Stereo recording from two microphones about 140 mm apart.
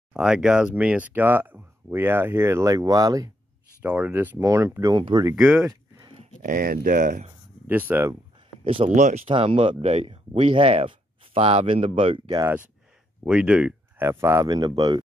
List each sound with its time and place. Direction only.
0.1 s speech: 5° right (ahead or behind); by 3.3 s 25° right (ahead or behind)
3.8 s speech: 10° right (ahead or behind)
4.9 s speech: 35° right (ahead or behind)
5.3 s speech: 10° right (ahead or behind)
5.6 s a sound: 25° right (ahead or behind)
6.4 s speech: 80° right
7.6 s speech: 15° right (ahead or behind)
8.6 s speech: 40° right (ahead or behind)
8.9 s speech: 55° right (ahead or behind)
13.2 s speech: 10° right (ahead or behind)
14.0 s speech: 20° right (ahead or behind)